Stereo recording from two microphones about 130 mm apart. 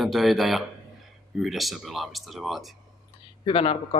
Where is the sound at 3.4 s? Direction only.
45° left (ahead or behind).